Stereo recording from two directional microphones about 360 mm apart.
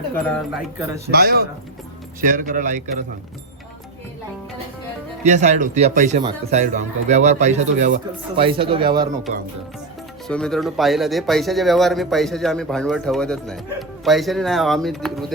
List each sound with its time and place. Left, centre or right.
0.2 s speech: centre
0.8 s speech: centre
1.1 s a man's voice: right
5.2 s a man's voice: centre
10.2 s speech: centre